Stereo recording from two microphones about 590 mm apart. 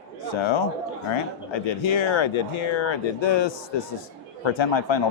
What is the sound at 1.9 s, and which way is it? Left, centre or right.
Speech, left.